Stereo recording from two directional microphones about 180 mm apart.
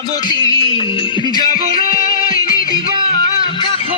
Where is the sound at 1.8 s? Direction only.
30° right (ahead or behind).